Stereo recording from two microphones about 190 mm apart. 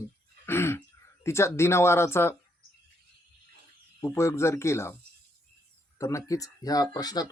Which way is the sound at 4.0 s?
15° left (ahead or behind).